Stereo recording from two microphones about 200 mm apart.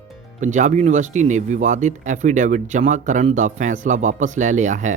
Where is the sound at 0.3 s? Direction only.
40° right (ahead or behind).